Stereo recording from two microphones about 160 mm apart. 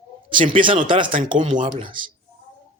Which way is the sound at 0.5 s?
35° right (ahead or behind).